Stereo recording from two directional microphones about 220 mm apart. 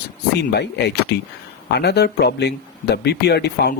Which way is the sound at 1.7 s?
50° left (ahead or behind).